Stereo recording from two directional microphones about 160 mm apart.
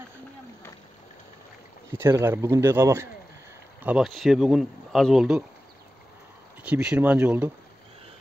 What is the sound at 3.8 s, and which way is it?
Speech, 5° right (ahead or behind).